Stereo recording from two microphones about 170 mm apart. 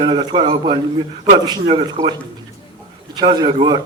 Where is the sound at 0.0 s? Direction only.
25° right (ahead or behind).